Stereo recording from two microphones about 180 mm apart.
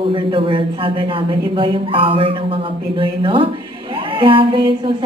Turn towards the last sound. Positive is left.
turn(degrees=-30)  # may be behind; listen again after turning